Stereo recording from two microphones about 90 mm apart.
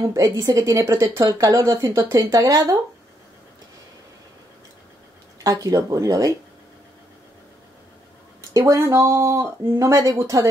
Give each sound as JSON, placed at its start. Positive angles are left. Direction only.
{"t": 0.0, "sound": "a woman's voice", "side_deg": -40}
{"t": 5.4, "sound": "a woman's voice", "side_deg": -40}
{"t": 8.4, "sound": "a woman's voice", "side_deg": -35}